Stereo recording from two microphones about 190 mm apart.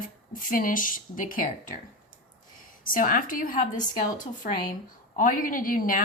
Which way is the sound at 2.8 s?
45° left (ahead or behind).